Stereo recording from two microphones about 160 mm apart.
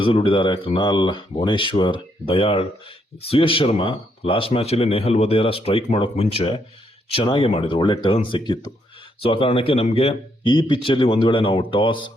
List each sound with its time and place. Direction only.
0.0 s speech: 35° left (ahead or behind)